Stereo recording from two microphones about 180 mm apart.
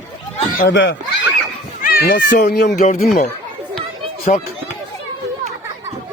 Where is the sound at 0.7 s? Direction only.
90° left.